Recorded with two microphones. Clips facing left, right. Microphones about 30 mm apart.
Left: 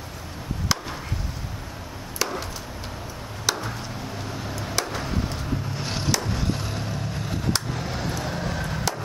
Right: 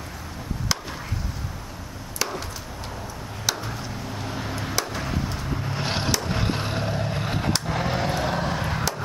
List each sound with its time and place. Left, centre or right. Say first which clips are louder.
2.1 s chop: left 1 dB; centre
3.4 s chop: left 1 dB; centre
4.3 s a sound: right 4 dB; centre
4.7 s chop: left 1 dB; centre
5.7 s skateboard: right 2 dB; right
6.2 s a sound: right 2 dB; right